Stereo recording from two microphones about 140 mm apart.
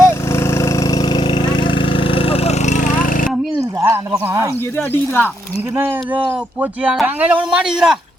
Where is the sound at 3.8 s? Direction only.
20° right (ahead or behind).